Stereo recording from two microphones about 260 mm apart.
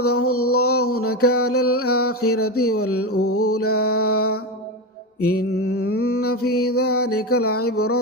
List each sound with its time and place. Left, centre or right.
0.0 s mantra: left